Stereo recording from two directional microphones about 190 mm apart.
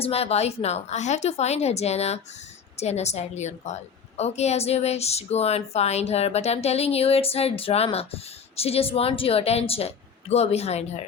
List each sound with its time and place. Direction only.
0.0 s speech: 30° left (ahead or behind)